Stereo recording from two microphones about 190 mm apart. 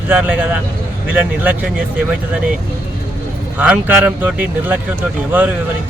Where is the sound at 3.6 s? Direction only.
5° right (ahead or behind).